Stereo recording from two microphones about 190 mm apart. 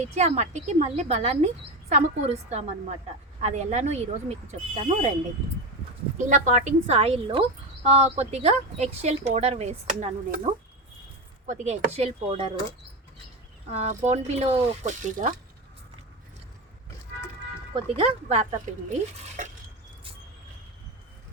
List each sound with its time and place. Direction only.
0.1 s speech: 35° right (ahead or behind)
6.1 s speech: 40° right (ahead or behind)
11.4 s speech: 40° right (ahead or behind)
13.7 s speech: 35° right (ahead or behind)
17.7 s speech: 30° right (ahead or behind)